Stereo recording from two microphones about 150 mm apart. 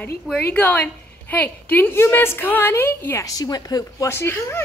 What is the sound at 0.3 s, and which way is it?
A woman's voice, 10° left (ahead or behind).